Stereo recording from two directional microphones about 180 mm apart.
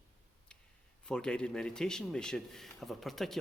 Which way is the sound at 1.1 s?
5° left (ahead or behind).